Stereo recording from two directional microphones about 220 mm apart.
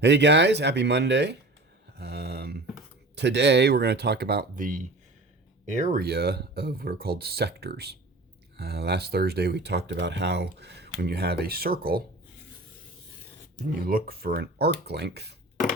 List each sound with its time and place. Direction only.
0.0 s speech: 50° right (ahead or behind)
2.0 s a sound: 45° right (ahead or behind)
3.2 s speech: 50° right (ahead or behind)
13.7 s speech: 40° right (ahead or behind)